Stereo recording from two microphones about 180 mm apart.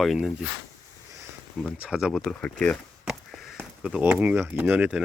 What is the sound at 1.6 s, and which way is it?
Speech, centre (ahead or behind).